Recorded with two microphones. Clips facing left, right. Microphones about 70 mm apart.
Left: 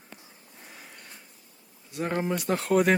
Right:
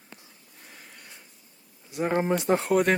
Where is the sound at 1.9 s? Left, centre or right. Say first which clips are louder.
Right 4 dB; right.